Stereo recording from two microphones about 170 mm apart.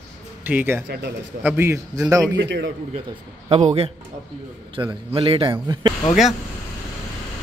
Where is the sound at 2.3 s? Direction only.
90° right.